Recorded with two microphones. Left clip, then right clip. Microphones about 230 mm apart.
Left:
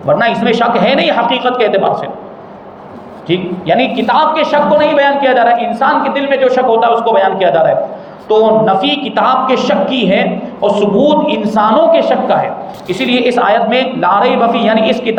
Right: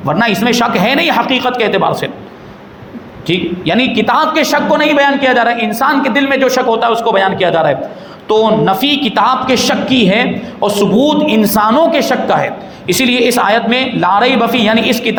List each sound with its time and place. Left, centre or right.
0.1 s a man's voice: right
3.2 s a man's voice: right